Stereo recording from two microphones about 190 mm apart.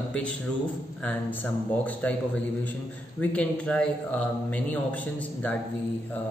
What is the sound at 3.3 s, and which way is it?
A man's voice, 5° left (ahead or behind).